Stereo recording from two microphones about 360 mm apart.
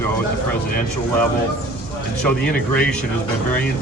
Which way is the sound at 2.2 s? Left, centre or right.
Centre.